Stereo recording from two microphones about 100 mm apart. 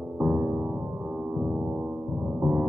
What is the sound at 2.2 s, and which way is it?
Gong, 15° right (ahead or behind).